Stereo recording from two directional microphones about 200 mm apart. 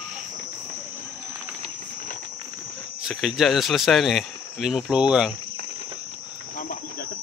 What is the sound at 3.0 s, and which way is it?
Speech, centre (ahead or behind).